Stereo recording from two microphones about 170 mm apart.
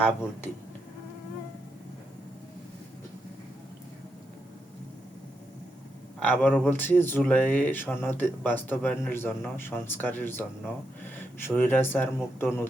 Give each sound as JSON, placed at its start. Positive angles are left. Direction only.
{"t": 0.0, "sound": "speech", "side_deg": 10}
{"t": 6.1, "sound": "speech", "side_deg": 10}